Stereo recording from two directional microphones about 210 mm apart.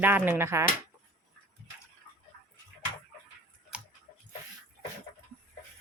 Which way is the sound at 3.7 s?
5° right (ahead or behind).